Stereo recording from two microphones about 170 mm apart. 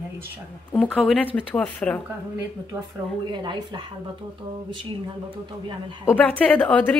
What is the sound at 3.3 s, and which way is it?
Speech, 25° right (ahead or behind).